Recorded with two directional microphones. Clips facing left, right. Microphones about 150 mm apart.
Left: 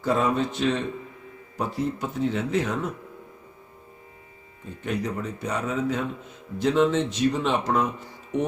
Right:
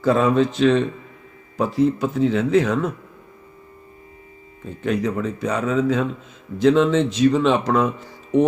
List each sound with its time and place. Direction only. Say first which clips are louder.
0.0 s speech: right 6 dB; 90° right
4.8 s speech: right 7 dB; 90° right